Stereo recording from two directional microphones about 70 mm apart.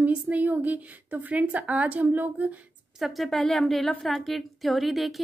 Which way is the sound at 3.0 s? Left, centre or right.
Centre.